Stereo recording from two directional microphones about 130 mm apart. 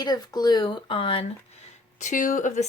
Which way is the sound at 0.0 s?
30° left (ahead or behind).